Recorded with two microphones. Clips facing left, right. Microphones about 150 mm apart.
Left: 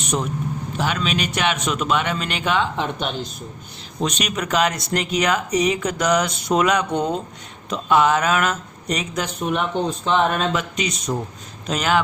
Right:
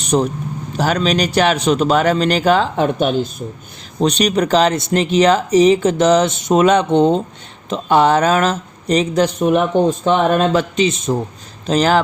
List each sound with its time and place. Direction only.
0.0 s vehicle: 35° right (ahead or behind)
0.8 s a man's voice: 40° right (ahead or behind)
4.0 s a man's voice: 35° right (ahead or behind)
9.7 s a man's voice: 50° right (ahead or behind); by 12.0 s 35° right (ahead or behind)